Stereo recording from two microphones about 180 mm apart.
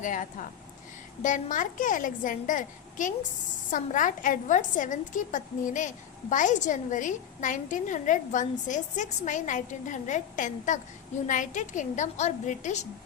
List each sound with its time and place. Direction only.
0.0 s a woman's voice: 45° left (ahead or behind)